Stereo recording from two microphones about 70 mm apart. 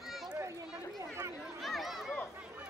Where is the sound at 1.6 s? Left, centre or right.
Centre.